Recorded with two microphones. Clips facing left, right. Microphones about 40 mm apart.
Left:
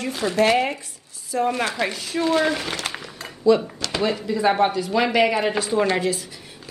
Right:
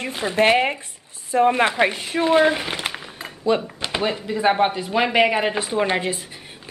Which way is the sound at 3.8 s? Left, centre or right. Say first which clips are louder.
Even; right.